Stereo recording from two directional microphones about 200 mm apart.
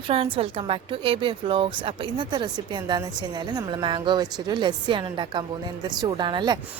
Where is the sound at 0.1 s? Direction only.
30° right (ahead or behind).